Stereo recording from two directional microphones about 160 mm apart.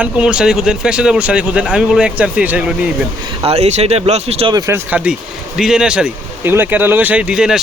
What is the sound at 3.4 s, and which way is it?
Speech, 45° right (ahead or behind).